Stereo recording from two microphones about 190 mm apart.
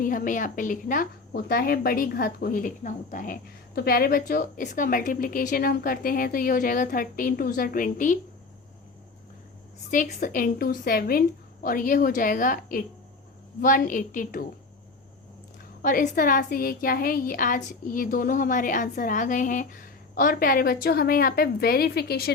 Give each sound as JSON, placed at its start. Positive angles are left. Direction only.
{"t": 0.0, "sound": "a woman's voice", "side_deg": 45}
{"t": 3.8, "sound": "a woman's voice", "side_deg": 55}
{"t": 9.9, "sound": "a woman's voice", "side_deg": 45}
{"t": 15.8, "sound": "a woman's voice", "side_deg": 45}